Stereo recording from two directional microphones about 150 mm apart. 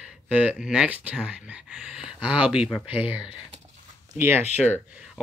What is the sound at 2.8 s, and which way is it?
Speech, 10° right (ahead or behind).